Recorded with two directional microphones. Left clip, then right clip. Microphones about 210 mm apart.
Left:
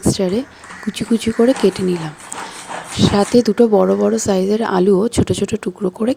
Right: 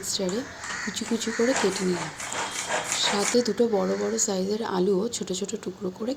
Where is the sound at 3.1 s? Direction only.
45° left (ahead or behind).